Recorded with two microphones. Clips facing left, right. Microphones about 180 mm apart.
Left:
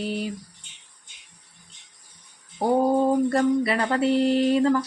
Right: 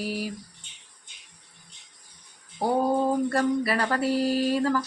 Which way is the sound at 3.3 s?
25° left (ahead or behind).